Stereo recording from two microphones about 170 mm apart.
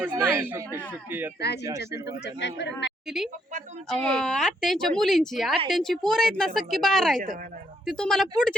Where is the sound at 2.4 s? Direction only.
90° left.